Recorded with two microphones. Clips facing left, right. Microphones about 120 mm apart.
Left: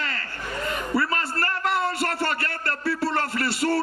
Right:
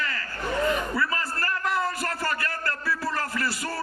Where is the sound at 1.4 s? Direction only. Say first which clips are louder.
Left 2 dB; 70° left (ahead or behind).